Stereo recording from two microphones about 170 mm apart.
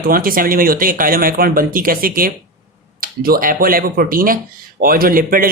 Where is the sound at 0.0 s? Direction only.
60° right (ahead or behind).